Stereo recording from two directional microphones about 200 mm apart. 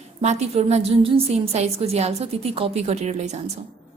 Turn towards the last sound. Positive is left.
turn(degrees=-35)  # may be behind; listen again after turning